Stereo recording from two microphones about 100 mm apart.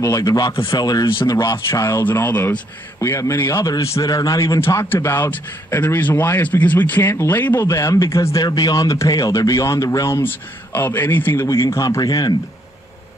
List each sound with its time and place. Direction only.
0.0 s a man's voice: 35° left (ahead or behind); by 2.6 s 15° left (ahead or behind)
3.0 s a man's voice: 30° left (ahead or behind)